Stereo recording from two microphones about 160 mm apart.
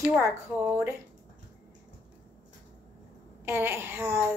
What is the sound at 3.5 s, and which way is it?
Speech, 15° right (ahead or behind).